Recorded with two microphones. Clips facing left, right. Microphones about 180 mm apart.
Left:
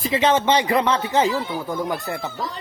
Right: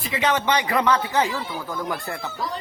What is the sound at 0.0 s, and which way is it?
Speech, 25° left (ahead or behind).